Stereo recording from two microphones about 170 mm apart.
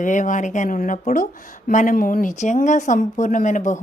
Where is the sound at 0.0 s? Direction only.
50° left (ahead or behind).